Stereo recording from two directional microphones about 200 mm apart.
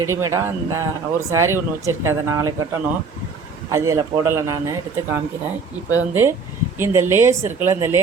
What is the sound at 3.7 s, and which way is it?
A woman's voice, 15° right (ahead or behind).